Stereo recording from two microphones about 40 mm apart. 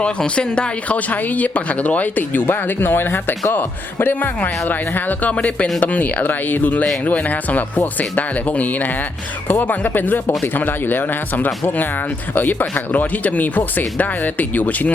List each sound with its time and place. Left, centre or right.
0.0 s speech: left
0.9 s speech: left